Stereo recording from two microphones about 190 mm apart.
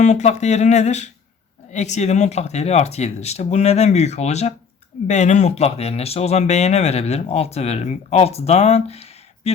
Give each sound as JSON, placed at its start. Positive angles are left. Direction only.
{"t": 0.0, "sound": "speech", "side_deg": 40}